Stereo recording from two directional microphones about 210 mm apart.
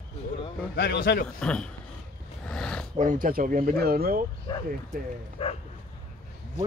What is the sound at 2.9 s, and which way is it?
Speech, 40° right (ahead or behind).